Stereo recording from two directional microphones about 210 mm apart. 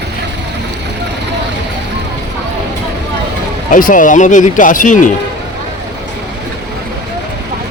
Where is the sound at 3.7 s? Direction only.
40° left (ahead or behind).